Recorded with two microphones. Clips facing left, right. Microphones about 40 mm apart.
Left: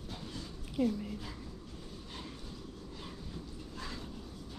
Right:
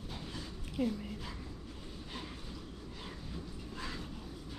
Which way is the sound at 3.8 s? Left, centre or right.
Centre.